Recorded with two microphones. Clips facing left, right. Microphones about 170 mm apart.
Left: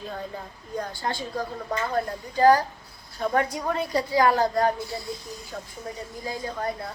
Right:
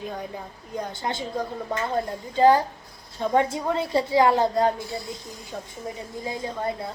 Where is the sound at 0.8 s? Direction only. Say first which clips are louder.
Right 1 dB; 20° right (ahead or behind).